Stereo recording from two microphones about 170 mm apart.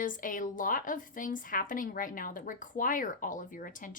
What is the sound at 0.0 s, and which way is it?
Speech, 50° left (ahead or behind).